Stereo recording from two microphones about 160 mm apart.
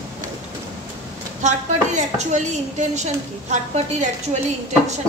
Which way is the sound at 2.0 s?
50° right (ahead or behind).